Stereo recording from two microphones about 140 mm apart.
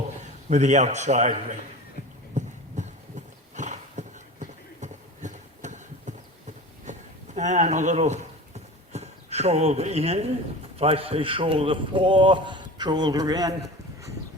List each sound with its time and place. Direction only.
0.5 s a man's voice: 55° right (ahead or behind)
2.4 s clip-clop: 60° right (ahead or behind)
3.5 s beatboxing: 60° right (ahead or behind)
6.9 s a sound: 60° right (ahead or behind)
10.8 s speech: 45° right (ahead or behind); by 14.1 s 25° right (ahead or behind)